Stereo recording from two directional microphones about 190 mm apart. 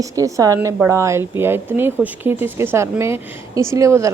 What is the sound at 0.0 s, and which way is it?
A woman's voice, 15° right (ahead or behind).